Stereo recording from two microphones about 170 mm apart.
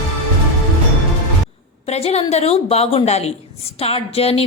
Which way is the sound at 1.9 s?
40° left (ahead or behind).